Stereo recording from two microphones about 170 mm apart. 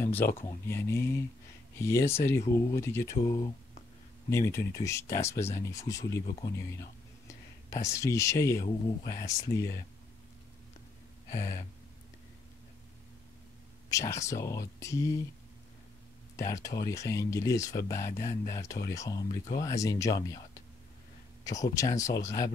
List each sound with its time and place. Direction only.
0.0 s speech: 10° left (ahead or behind)
11.3 s speech: 15° left (ahead or behind)
13.8 s speech: 20° left (ahead or behind)
16.3 s speech: 20° left (ahead or behind)